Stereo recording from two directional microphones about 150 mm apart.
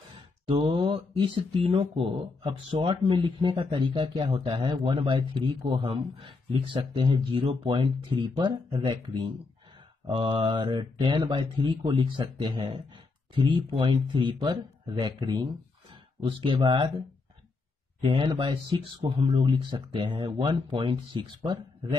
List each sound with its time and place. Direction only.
0.1 s speech: 40° right (ahead or behind)
18.0 s speech: 35° right (ahead or behind)